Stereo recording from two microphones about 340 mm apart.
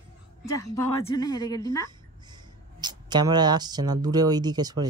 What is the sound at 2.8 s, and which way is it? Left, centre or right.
Speech, centre.